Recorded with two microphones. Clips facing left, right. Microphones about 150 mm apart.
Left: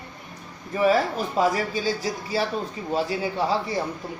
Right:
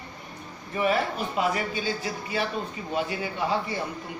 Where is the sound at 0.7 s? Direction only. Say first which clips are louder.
Left 4 dB; 35° left (ahead or behind).